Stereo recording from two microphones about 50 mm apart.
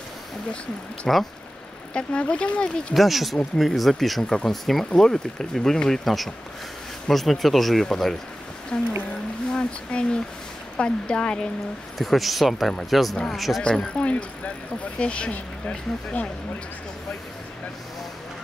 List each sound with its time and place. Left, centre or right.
1.1 s speech: centre
2.0 s speech: centre
2.9 s speech: centre
8.7 s speech: left
12.0 s speech: centre
13.6 s speech: left